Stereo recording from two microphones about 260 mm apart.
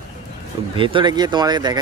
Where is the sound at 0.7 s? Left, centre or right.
Centre.